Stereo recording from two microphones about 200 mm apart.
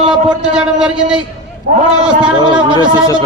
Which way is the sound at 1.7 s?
55° right (ahead or behind).